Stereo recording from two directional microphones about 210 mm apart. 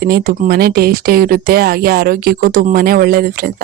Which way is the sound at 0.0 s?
45° right (ahead or behind).